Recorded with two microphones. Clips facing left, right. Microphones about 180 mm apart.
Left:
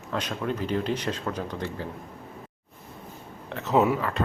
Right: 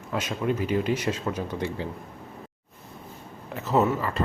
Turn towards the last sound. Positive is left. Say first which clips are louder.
# even
turn(degrees=0)  # may be behind; listen again after turning